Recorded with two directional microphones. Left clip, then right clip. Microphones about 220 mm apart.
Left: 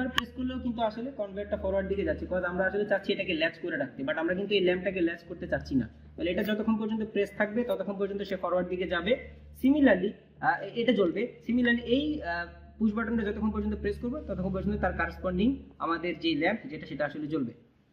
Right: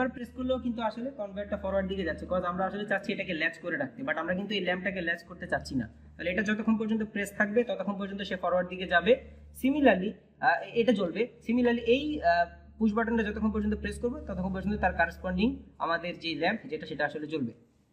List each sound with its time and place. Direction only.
0.0 s speech: 50° right (ahead or behind)
2.4 s speech: 50° right (ahead or behind)